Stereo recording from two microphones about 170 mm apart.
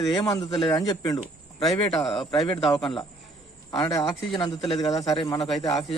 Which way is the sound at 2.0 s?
Centre (ahead or behind).